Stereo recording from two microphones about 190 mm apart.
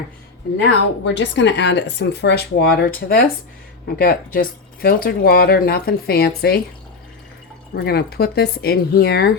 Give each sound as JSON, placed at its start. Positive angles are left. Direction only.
{"t": 0.6, "sound": "speech", "side_deg": 70}
{"t": 7.8, "sound": "speech", "side_deg": 55}